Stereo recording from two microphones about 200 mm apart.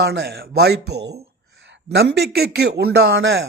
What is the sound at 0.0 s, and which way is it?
A man's voice, 55° right (ahead or behind).